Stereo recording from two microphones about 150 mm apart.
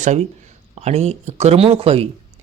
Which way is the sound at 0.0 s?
50° right (ahead or behind).